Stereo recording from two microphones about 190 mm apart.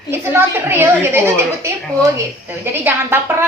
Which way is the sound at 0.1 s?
10° right (ahead or behind).